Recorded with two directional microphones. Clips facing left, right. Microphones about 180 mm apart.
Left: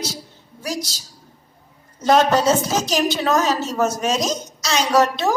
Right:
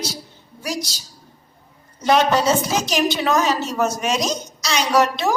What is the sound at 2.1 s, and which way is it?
A woman's voice, 40° left (ahead or behind).